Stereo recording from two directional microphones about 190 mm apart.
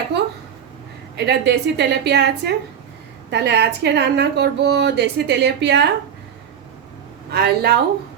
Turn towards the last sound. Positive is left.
turn(degrees=-55)  # may be behind; listen again after turning